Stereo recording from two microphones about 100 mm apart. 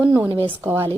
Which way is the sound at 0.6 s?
25° right (ahead or behind).